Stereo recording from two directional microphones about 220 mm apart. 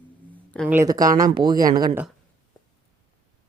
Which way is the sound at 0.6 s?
10° right (ahead or behind).